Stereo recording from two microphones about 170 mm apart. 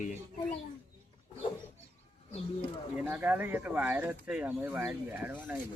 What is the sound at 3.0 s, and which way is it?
Speech, 10° right (ahead or behind).